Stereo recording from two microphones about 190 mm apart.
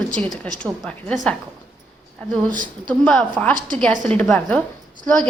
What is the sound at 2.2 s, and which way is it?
A woman's voice, 5° left (ahead or behind).